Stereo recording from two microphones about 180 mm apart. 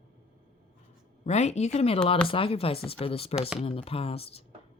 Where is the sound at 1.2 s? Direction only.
40° left (ahead or behind).